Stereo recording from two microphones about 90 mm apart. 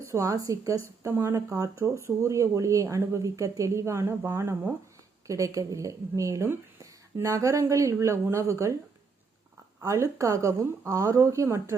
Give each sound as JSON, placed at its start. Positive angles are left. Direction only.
{"t": 0.0, "sound": "speech", "side_deg": -35}
{"t": 9.8, "sound": "speech", "side_deg": -35}